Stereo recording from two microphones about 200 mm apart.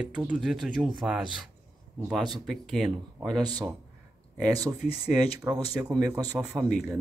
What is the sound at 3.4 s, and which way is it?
Speech, 20° right (ahead or behind).